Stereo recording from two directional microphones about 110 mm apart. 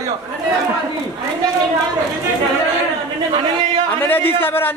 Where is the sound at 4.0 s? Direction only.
15° left (ahead or behind).